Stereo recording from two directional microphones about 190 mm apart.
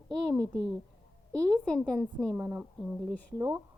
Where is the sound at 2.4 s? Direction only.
15° right (ahead or behind).